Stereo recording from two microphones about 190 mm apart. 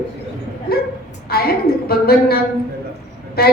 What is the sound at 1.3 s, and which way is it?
A woman's voice, 55° left (ahead or behind).